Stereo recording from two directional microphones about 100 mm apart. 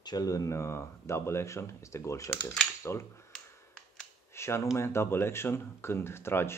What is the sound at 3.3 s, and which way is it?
Finger snapping, 5° left (ahead or behind).